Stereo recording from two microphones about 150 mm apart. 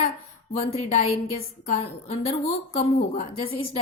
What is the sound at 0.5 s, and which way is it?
A woman's voice, 45° left (ahead or behind).